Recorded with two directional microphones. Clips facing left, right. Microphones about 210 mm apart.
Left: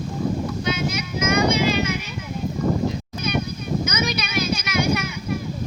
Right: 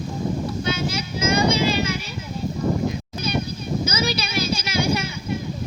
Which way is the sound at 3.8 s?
30° right (ahead or behind).